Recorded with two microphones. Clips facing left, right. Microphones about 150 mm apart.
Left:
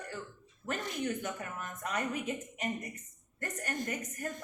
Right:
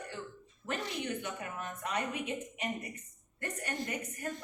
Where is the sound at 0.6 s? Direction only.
45° left (ahead or behind).